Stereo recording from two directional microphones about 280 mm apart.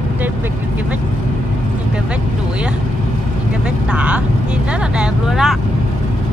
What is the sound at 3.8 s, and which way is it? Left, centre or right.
Vehicle, centre.